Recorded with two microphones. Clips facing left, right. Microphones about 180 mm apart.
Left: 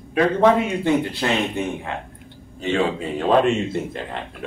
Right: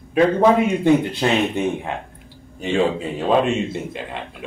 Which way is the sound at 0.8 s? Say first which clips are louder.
Right 4 dB; 15° right (ahead or behind).